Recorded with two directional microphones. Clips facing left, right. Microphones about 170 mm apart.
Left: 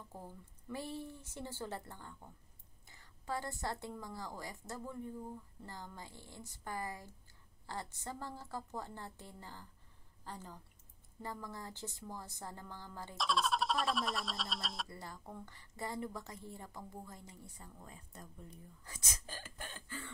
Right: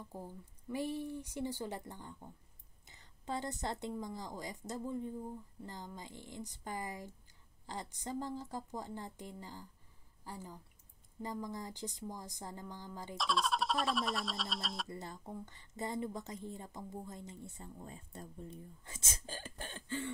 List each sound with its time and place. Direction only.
0.1 s a woman's voice: 15° right (ahead or behind)
13.2 s speech: centre (ahead or behind)
14.9 s a woman's voice: 20° right (ahead or behind)